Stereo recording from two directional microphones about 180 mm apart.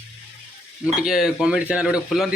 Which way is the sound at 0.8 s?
Centre (ahead or behind).